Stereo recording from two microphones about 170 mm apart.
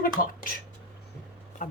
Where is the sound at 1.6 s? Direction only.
45° left (ahead or behind).